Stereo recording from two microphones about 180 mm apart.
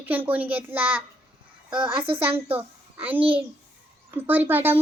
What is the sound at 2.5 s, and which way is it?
A child's voice, 10° right (ahead or behind).